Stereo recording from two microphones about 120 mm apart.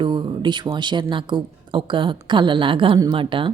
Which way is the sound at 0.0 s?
40° right (ahead or behind).